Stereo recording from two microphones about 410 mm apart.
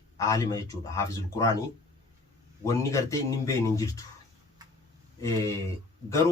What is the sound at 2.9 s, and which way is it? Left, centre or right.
Speech, centre.